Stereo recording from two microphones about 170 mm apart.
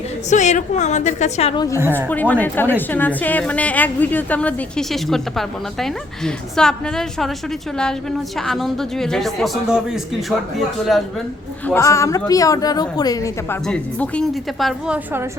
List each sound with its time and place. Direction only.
0.3 s a woman's voice: 45° left (ahead or behind)
2.0 s a woman's voice: 10° left (ahead or behind)
8.4 s a woman's voice: centre (ahead or behind)
11.6 s a woman's voice: 15° left (ahead or behind)
13.7 s a woman's voice: 5° left (ahead or behind); by 15.3 s 10° right (ahead or behind)